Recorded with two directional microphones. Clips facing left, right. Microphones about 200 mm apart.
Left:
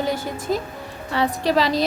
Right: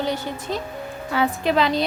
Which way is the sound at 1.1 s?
Centre (ahead or behind).